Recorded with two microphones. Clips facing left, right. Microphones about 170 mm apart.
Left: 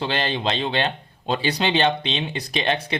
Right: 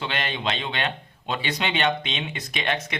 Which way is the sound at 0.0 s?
35° left (ahead or behind).